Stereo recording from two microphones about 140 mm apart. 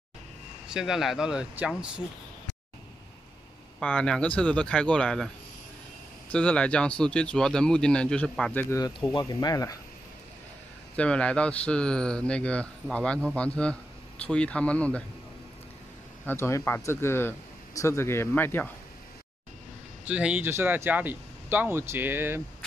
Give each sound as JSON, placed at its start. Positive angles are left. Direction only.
{"t": 0.7, "sound": "speech", "side_deg": -5}
{"t": 3.8, "sound": "speech", "side_deg": 10}
{"t": 6.3, "sound": "speech", "side_deg": 10}
{"t": 8.7, "sound": "speech", "side_deg": 25}
{"t": 11.0, "sound": "speech", "side_deg": 10}
{"t": 16.3, "sound": "speech", "side_deg": 20}
{"t": 20.1, "sound": "speech", "side_deg": -10}